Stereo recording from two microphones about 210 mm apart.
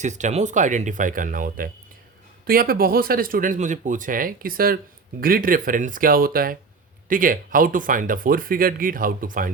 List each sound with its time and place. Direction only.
0.0 s speech: 35° right (ahead or behind)